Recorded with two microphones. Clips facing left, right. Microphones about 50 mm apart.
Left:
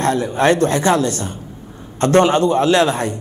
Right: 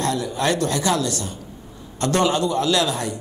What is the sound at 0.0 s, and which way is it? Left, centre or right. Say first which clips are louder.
A man's voice: left 6 dB; left.